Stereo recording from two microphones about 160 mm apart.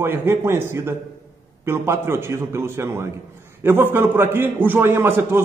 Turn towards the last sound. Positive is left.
turn(degrees=-15)  # may be behind; listen again after turning